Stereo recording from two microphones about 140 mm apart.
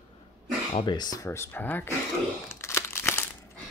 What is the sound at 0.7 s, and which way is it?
Speech, 30° left (ahead or behind).